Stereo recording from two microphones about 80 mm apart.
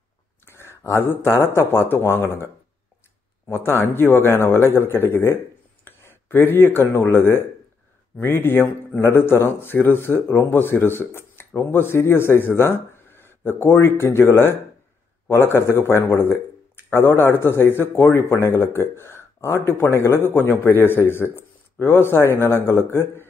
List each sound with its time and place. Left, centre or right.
0.5 s a sound: left
1.0 s a man's voice: left
1.3 s a man's voice: left